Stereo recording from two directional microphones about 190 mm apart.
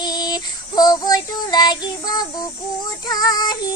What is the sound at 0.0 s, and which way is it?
Child singing, 20° left (ahead or behind).